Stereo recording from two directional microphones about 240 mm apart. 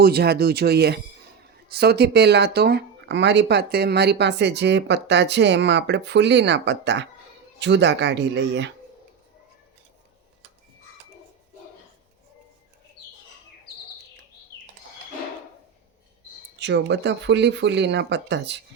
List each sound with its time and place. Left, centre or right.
0.0 s speech: right
16.6 s speech: right